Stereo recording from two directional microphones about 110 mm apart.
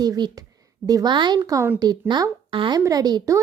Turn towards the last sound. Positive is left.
turn(degrees=-35)  # may be behind; listen again after turning